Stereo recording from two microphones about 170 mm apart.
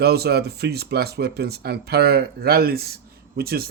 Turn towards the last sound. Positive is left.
turn(degrees=-65)  # may be behind; listen again after turning